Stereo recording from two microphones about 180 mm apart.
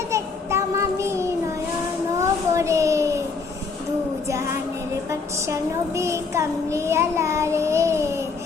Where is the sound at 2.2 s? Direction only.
15° right (ahead or behind).